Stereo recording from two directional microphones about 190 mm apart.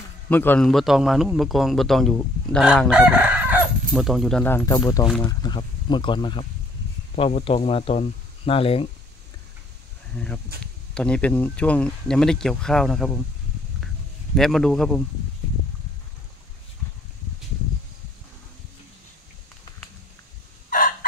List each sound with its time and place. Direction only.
0.3 s a man's voice: 10° left (ahead or behind); by 8.8 s 30° left (ahead or behind)
10.1 s a man's voice: 5° left (ahead or behind)
14.3 s a man's voice: centre (ahead or behind)